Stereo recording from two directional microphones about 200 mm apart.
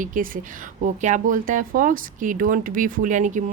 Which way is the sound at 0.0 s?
40° right (ahead or behind).